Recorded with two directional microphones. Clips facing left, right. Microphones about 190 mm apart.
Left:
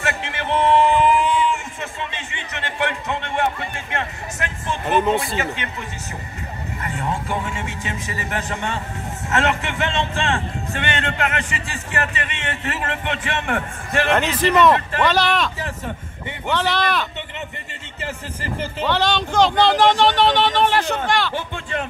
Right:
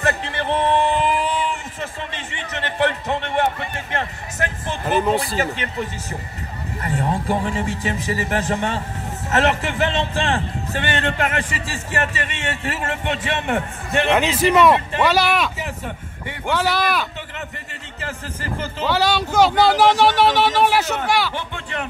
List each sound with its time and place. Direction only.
0.0 s a sound: 35° right (ahead or behind)
2.5 s speech: 35° right (ahead or behind)
4.8 s speech: centre (ahead or behind)
5.4 s a man's voice: 35° right (ahead or behind)
14.1 s speech: 10° right (ahead or behind)
18.9 s speech: 10° right (ahead or behind)